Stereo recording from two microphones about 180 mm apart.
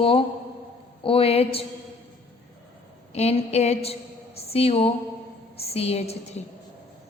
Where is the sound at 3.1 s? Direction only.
35° left (ahead or behind).